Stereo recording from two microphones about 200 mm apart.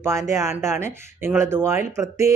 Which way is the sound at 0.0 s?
15° right (ahead or behind).